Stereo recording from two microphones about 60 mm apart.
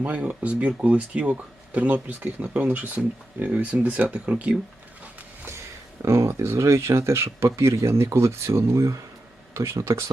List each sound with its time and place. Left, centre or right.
0.3 s speech: right
6.0 s speech: right